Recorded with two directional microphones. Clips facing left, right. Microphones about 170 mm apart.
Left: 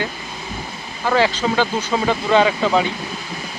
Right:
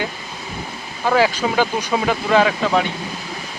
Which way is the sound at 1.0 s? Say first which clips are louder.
Right 1 dB; 10° right (ahead or behind).